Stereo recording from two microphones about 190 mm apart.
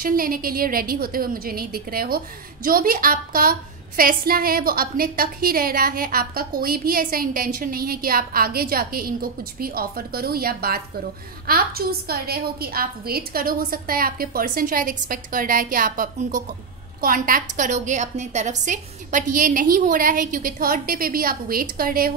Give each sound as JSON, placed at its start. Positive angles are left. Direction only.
{"t": 0.0, "sound": "a woman's voice", "side_deg": -50}